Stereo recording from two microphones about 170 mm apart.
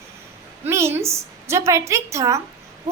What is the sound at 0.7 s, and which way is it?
A woman's voice, 15° right (ahead or behind).